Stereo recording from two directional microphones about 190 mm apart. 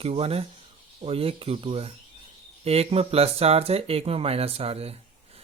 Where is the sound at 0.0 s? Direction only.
30° right (ahead or behind).